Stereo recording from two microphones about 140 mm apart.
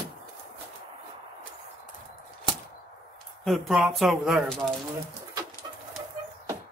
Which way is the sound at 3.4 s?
Centre (ahead or behind).